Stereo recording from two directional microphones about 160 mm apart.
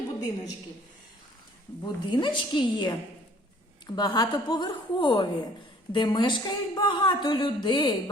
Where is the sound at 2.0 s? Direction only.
30° left (ahead or behind).